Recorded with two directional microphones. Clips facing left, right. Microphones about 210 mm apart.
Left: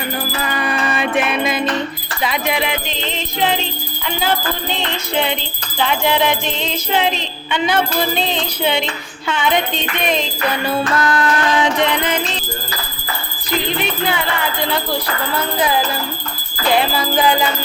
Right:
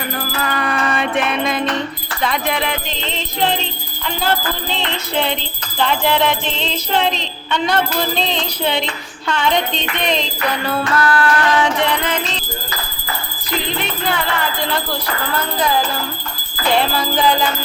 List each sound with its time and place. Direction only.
0.5 s music: 5° left (ahead or behind)
5.8 s music: 5° left (ahead or behind)
10.8 s music: 20° left (ahead or behind)
16.7 s music: 5° left (ahead or behind)